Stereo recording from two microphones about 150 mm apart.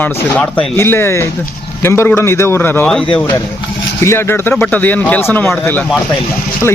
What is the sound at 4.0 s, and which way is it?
Speech, 15° left (ahead or behind).